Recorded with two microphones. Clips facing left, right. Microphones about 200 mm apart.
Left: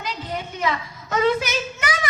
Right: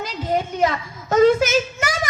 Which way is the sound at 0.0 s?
45° right (ahead or behind).